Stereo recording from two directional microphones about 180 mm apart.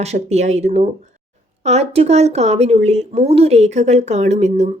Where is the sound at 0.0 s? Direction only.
40° right (ahead or behind).